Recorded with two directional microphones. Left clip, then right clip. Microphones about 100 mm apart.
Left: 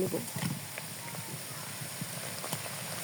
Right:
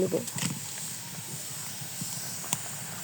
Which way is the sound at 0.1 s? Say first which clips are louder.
Right 6 dB; 50° right (ahead or behind).